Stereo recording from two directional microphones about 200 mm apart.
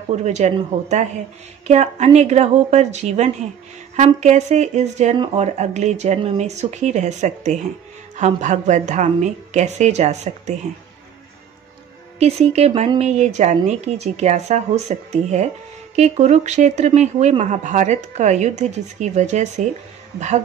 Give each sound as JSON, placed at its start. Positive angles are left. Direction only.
{"t": 0.1, "sound": "speech", "side_deg": -35}
{"t": 12.2, "sound": "speech", "side_deg": -30}